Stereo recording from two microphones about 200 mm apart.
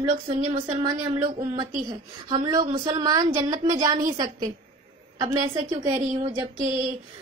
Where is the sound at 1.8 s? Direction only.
20° right (ahead or behind).